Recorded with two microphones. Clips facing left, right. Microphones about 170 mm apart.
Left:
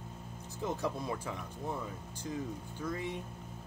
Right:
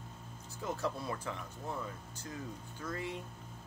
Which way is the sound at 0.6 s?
15° left (ahead or behind).